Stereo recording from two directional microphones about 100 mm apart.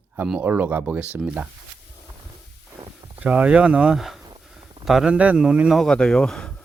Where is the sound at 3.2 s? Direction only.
15° right (ahead or behind).